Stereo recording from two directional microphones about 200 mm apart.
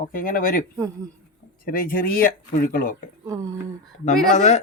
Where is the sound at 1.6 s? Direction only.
45° left (ahead or behind).